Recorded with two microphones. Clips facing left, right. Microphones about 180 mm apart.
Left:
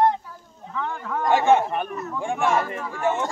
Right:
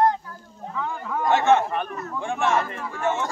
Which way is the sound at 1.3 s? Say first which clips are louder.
Left 1 dB; 10° left (ahead or behind).